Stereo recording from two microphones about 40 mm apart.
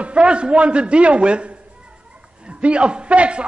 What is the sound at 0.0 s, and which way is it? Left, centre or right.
A man's voice, right.